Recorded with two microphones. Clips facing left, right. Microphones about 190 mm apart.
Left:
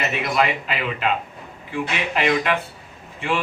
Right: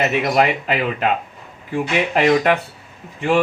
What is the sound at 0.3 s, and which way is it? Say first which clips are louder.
Speech: right 4 dB; 45° right (ahead or behind).